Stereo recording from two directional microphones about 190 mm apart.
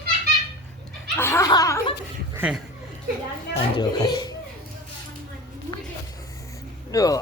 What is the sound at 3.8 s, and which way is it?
Speech, 20° left (ahead or behind).